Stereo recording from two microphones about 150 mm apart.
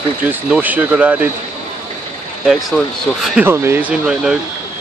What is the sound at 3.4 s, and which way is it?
Speech, 15° right (ahead or behind).